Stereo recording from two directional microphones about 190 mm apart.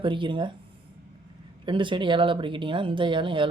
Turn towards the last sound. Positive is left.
turn(degrees=-25)  # may be behind; listen again after turning